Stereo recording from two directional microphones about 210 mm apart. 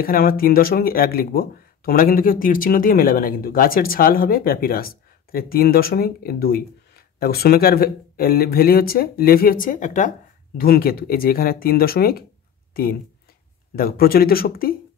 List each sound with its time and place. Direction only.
0.0 s speech: 45° left (ahead or behind)
13.7 s speech: 45° left (ahead or behind)